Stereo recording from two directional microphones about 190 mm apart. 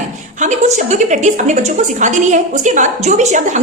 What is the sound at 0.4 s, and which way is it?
A woman's voice, 40° right (ahead or behind).